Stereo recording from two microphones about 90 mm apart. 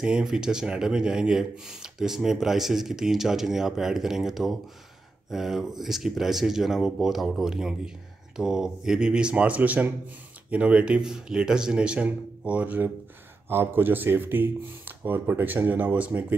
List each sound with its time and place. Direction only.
0.0 s speech: 10° right (ahead or behind)